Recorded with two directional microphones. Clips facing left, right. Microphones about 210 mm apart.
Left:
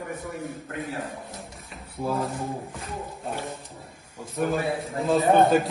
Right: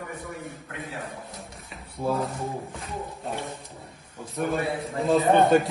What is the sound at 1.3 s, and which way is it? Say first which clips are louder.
A man's voice: left 1 dB; centre (ahead or behind).